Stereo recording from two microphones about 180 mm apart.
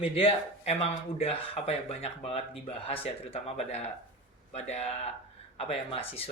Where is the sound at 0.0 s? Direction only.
30° left (ahead or behind).